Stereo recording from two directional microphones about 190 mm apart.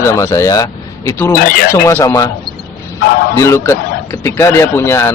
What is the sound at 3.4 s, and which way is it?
Speech, 15° left (ahead or behind).